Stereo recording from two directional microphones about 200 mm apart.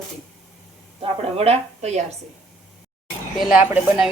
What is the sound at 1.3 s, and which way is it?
Speech, 30° right (ahead or behind).